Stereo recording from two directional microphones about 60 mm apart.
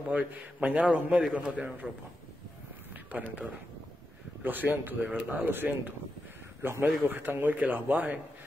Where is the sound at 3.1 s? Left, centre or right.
Right.